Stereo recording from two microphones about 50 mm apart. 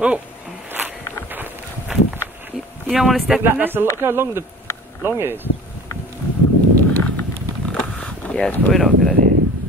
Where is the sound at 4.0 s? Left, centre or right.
Right.